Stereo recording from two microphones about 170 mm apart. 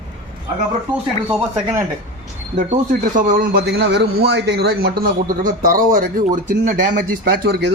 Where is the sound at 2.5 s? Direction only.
50° right (ahead or behind).